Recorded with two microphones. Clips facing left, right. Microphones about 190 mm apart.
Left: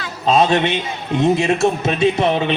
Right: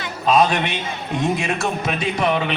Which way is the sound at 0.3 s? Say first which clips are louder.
Left 2 dB; 25° left (ahead or behind).